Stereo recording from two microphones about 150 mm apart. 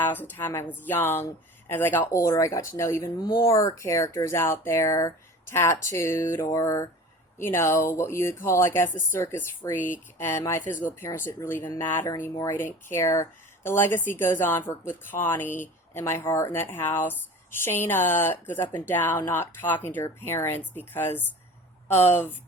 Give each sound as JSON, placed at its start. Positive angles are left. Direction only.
{"t": 0.0, "sound": "a woman's voice", "side_deg": 10}
{"t": 10.6, "sound": "speech", "side_deg": 60}
{"t": 11.3, "sound": "speech", "side_deg": 15}